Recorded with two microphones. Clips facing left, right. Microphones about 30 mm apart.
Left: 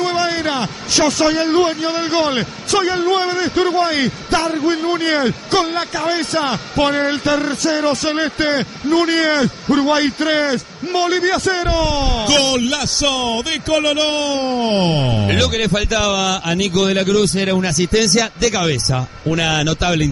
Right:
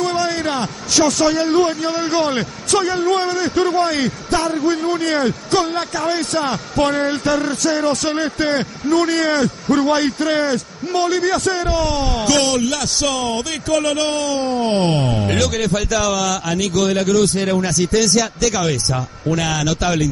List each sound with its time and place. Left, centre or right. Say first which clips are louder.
0.0 s a sound: left 1 dB; left
1.2 s speech: left 1 dB; left
4.5 s speech: left 1 dB; left
8.1 s a man's voice: left 1 dB; left